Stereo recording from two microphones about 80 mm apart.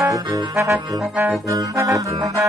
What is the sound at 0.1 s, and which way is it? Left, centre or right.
Trombone, right.